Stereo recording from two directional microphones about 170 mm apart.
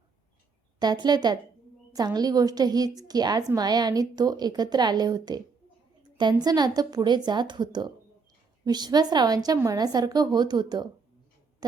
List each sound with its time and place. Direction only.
0.8 s a woman's voice: 25° right (ahead or behind)
6.0 s a sound: 25° right (ahead or behind)
6.4 s a woman's voice: 20° right (ahead or behind)